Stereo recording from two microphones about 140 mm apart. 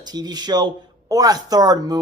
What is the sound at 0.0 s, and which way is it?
Speech, 30° right (ahead or behind).